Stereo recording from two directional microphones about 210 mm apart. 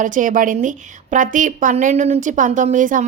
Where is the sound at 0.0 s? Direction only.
40° right (ahead or behind).